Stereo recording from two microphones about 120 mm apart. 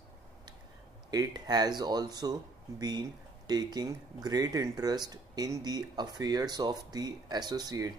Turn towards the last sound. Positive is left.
turn(degrees=-35)  # may be behind; listen again after turning